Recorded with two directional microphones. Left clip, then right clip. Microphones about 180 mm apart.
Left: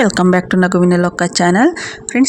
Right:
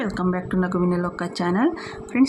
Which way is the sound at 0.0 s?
45° left (ahead or behind).